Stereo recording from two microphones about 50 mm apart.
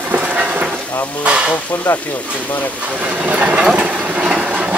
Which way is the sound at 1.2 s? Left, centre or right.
Centre.